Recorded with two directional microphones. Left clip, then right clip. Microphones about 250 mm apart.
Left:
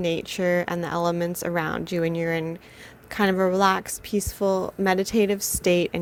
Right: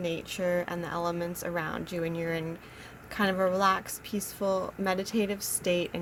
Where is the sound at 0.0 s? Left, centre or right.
Left.